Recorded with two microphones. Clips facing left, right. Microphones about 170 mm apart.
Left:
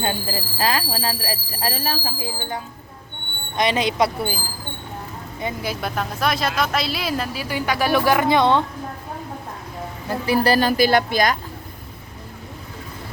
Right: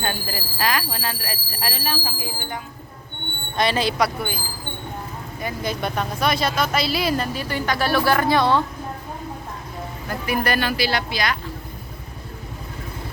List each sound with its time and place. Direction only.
0.0 s speech: 25° left (ahead or behind)
3.6 s speech: 20° left (ahead or behind)
5.6 s speech: centre (ahead or behind); by 8.6 s 20° left (ahead or behind)
10.1 s a woman's voice: 30° left (ahead or behind); by 11.3 s 45° left (ahead or behind)